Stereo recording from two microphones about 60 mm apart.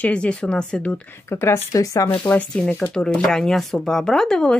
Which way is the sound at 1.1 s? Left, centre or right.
Left.